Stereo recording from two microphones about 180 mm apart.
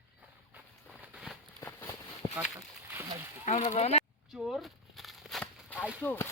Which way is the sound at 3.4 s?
40° left (ahead or behind).